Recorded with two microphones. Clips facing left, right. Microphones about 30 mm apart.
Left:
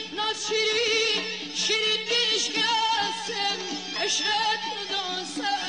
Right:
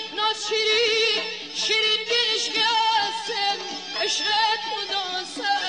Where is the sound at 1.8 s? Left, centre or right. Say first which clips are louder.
Right 3 dB; centre.